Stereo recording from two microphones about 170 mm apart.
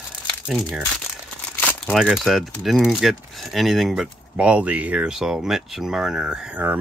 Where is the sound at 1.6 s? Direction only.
10° left (ahead or behind).